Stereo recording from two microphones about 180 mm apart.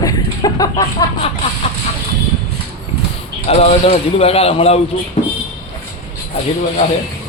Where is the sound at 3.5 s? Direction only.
35° left (ahead or behind).